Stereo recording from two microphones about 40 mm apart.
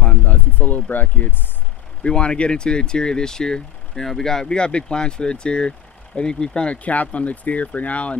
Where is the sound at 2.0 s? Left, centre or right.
Left.